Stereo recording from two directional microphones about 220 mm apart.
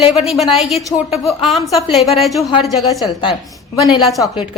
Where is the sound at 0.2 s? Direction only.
Centre (ahead or behind).